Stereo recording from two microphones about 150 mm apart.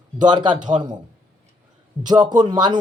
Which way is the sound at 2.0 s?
25° right (ahead or behind).